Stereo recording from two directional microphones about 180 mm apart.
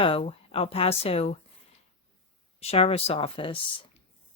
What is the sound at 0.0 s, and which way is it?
Speech, 30° left (ahead or behind).